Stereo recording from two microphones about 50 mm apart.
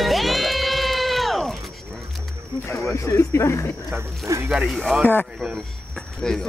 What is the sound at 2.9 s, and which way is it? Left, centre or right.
Speech, left.